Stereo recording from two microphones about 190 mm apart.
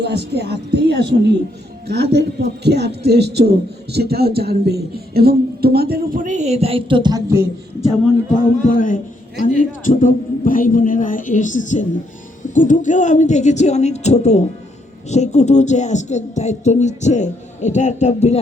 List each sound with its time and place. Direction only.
0.0 s speech: 60° right (ahead or behind); by 7.4 s 20° right (ahead or behind)
8.7 s a man's voice: 45° left (ahead or behind)